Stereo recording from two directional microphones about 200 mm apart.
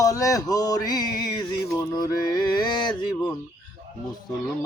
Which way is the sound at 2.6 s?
20° left (ahead or behind).